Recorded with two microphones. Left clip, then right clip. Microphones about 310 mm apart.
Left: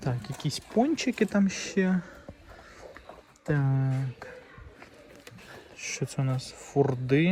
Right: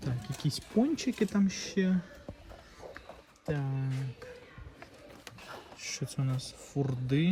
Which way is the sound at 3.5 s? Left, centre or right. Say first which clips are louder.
Left 6 dB; left.